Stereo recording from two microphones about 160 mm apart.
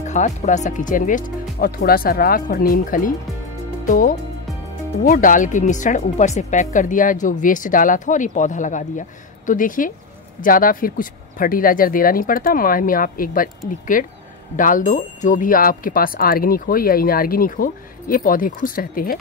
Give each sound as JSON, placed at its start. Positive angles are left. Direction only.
{"t": 0.0, "sound": "speech", "side_deg": 50}
{"t": 5.0, "sound": "speech", "side_deg": 60}